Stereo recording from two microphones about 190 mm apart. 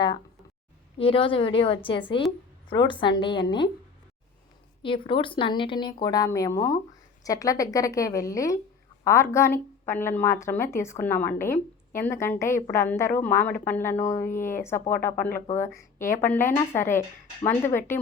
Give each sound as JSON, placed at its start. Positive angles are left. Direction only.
{"t": 0.9, "sound": "speech", "side_deg": 30}
{"t": 4.8, "sound": "a woman's voice", "side_deg": 25}